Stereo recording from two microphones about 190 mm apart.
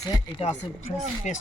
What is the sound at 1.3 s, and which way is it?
Speech, 40° left (ahead or behind).